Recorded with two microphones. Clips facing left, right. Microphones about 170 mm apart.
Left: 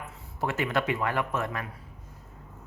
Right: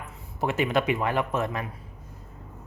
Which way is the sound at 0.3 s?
20° right (ahead or behind).